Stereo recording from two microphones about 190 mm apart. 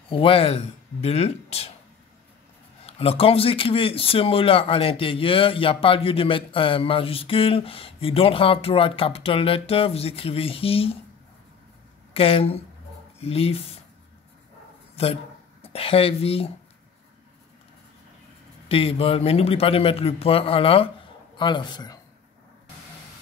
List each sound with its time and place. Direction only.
0.1 s speech: 30° left (ahead or behind)
2.9 s speech: 30° left (ahead or behind)
12.1 s speech: 30° left (ahead or behind)
15.6 s speech: 30° left (ahead or behind)
18.7 s speech: 30° left (ahead or behind)